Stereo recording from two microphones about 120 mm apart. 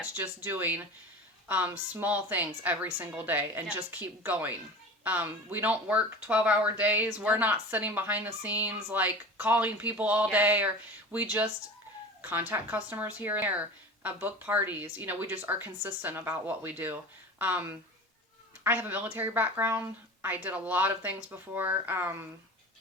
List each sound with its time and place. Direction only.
0.0 s speech: 15° right (ahead or behind)